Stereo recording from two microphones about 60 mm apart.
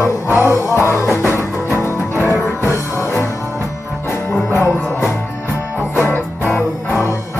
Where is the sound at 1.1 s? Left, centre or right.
Left.